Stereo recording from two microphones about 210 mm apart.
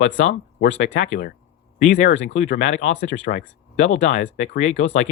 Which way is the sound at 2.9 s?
60° left (ahead or behind).